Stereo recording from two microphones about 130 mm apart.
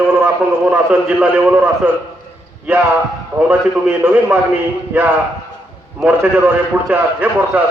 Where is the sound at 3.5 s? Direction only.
15° right (ahead or behind).